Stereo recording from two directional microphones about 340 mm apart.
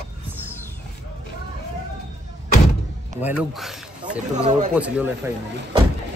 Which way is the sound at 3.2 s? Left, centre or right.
Centre.